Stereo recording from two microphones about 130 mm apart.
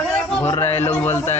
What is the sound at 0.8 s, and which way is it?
Speech, 15° left (ahead or behind).